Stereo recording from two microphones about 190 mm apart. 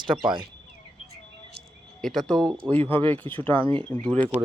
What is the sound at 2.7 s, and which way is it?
Speech, 30° right (ahead or behind).